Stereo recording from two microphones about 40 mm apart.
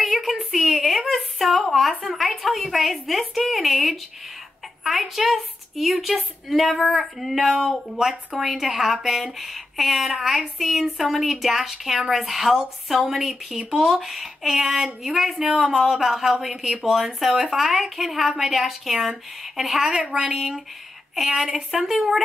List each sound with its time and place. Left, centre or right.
0.0 s a woman's voice: centre
20.1 s a woman's voice: centre
20.3 s a woman's voice: centre